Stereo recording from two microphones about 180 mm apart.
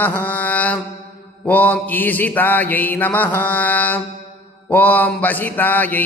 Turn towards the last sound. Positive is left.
turn(degrees=10)  # may be behind; listen again after turning